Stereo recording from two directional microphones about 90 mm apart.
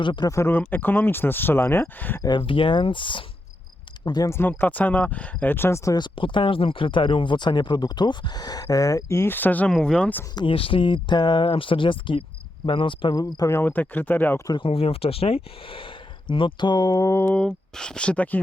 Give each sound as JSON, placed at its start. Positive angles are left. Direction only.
{"t": 0.0, "sound": "speech", "side_deg": 60}
{"t": 0.3, "sound": "speech", "side_deg": 35}
{"t": 0.7, "sound": "speech", "side_deg": 20}
{"t": 2.2, "sound": "speech", "side_deg": 60}
{"t": 4.0, "sound": "speech", "side_deg": 50}
{"t": 4.3, "sound": "speech", "side_deg": 25}
{"t": 5.9, "sound": "speech", "side_deg": 60}
{"t": 10.3, "sound": "speech", "side_deg": 80}
{"t": 13.1, "sound": "speech", "side_deg": 40}
{"t": 13.6, "sound": "speech", "side_deg": 20}
{"t": 14.5, "sound": "speech", "side_deg": 80}
{"t": 16.3, "sound": "speech", "side_deg": 65}
{"t": 17.3, "sound": "speech", "side_deg": 10}